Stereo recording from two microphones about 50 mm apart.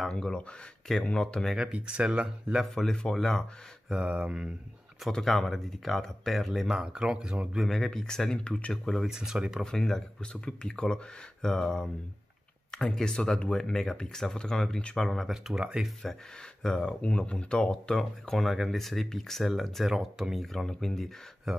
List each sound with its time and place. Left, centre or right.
0.1 s speech: centre
1.6 s speech: right
2.6 s speech: centre
3.9 s speech: right
5.1 s speech: centre
6.7 s speech: centre
7.5 s speech: centre
9.0 s speech: centre
9.7 s speech: centre
15.2 s speech: centre
16.6 s speech: centre
20.5 s speech: centre
21.5 s speech: centre